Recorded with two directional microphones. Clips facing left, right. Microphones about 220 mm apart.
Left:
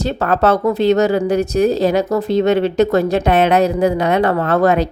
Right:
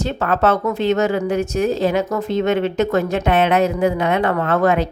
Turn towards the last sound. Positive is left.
turn(degrees=35)  # may be behind; listen again after turning